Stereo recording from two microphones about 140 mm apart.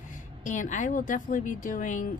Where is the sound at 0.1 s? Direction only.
65° left (ahead or behind).